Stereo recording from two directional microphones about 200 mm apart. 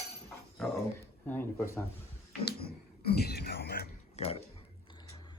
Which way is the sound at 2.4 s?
50° left (ahead or behind).